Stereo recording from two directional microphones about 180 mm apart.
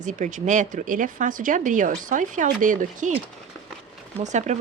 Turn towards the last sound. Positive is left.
turn(degrees=-40)  # may be behind; listen again after turning